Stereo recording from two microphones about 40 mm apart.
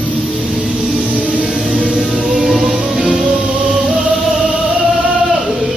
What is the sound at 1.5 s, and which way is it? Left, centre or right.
Music, centre.